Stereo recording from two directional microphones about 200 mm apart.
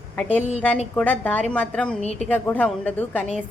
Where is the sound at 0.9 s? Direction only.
5° left (ahead or behind).